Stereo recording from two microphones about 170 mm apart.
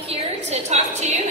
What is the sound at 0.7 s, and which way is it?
Speech, 40° right (ahead or behind).